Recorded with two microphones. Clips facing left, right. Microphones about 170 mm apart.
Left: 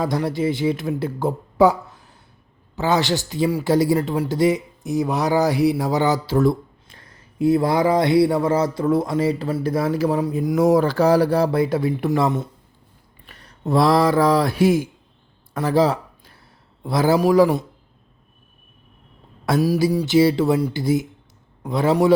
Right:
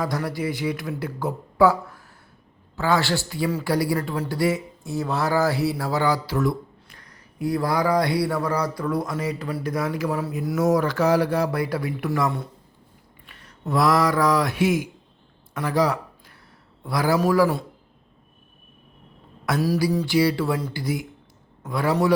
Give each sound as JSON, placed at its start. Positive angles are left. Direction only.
{"t": 0.0, "sound": "speech", "side_deg": 25}
{"t": 10.1, "sound": "speech", "side_deg": 20}
{"t": 10.6, "sound": "speech", "side_deg": 30}
{"t": 13.2, "sound": "speech", "side_deg": 35}
{"t": 15.5, "sound": "a sound", "side_deg": 30}
{"t": 16.8, "sound": "speech", "side_deg": 25}
{"t": 19.5, "sound": "speech", "side_deg": 15}